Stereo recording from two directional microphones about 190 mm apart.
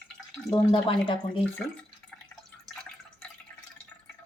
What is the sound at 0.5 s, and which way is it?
Speech, 25° left (ahead or behind).